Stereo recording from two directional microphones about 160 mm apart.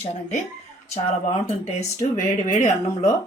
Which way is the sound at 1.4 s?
40° left (ahead or behind).